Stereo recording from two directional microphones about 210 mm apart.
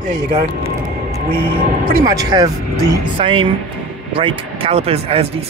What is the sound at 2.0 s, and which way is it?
Speech, 15° right (ahead or behind).